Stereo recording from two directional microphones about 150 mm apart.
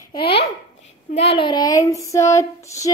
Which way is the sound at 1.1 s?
40° left (ahead or behind).